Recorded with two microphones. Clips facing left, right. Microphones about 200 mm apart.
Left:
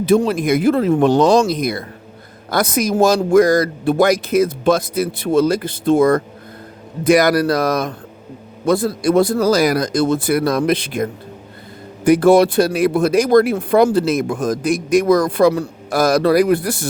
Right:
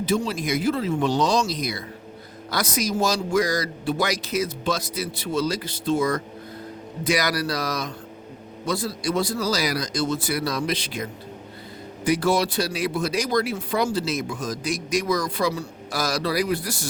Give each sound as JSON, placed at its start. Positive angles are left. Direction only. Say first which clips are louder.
{"t": 0.0, "sound": "speech", "louder": "left 9 dB", "side_deg": 55}